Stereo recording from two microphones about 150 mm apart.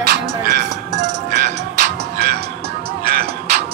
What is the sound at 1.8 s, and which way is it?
Music, 90° right.